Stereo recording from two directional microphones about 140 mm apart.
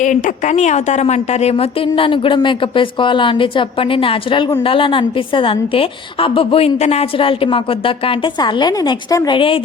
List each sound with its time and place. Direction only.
0.0 s a woman's voice: 65° left (ahead or behind); by 9.6 s 40° left (ahead or behind)